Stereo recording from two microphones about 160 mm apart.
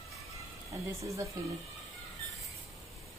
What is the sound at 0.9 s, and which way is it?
Speech, 20° right (ahead or behind).